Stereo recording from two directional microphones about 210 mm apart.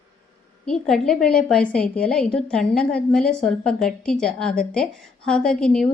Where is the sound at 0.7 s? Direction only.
Centre (ahead or behind).